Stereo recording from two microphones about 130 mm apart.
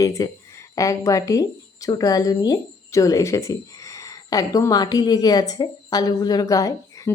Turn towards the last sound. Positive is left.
turn(degrees=25)  # may be behind; listen again after turning